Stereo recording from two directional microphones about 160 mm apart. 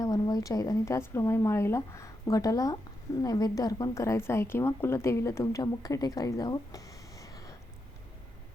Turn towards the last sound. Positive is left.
turn(degrees=20)  # may be behind; listen again after turning